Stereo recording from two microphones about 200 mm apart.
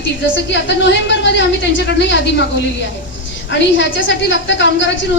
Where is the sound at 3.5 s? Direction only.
65° left (ahead or behind).